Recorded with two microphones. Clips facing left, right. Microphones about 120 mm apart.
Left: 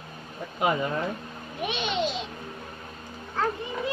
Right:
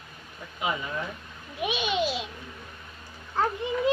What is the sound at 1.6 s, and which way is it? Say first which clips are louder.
Babbling: right 1 dB; 5° right (ahead or behind).